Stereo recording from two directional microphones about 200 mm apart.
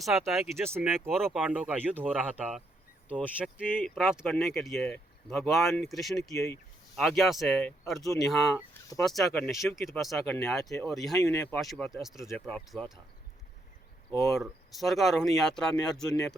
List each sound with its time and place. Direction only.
0.0 s speech: centre (ahead or behind)
0.6 s speech: 10° right (ahead or behind)
0.9 s speech: centre (ahead or behind)
3.7 s speech: 10° left (ahead or behind)
3.9 s speech: 5° right (ahead or behind)
6.3 s speech: 15° left (ahead or behind)
6.9 s speech: centre (ahead or behind)
11.2 s speech: 15° left (ahead or behind)
11.6 s speech: centre (ahead or behind)
14.3 s speech: centre (ahead or behind)